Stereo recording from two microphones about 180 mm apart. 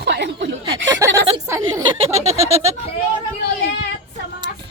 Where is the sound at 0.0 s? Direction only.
70° right (ahead or behind).